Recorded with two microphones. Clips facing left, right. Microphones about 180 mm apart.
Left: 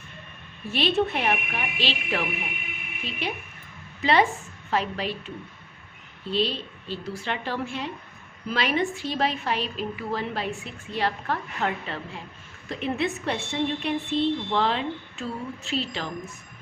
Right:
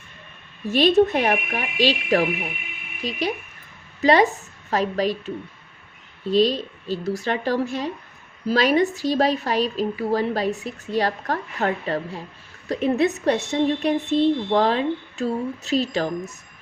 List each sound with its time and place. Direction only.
0.7 s a woman's voice: 45° right (ahead or behind)
6.3 s a woman's voice: 40° right (ahead or behind)